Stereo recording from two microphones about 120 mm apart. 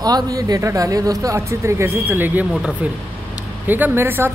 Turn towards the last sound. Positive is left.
turn(degrees=-20)  # may be behind; listen again after turning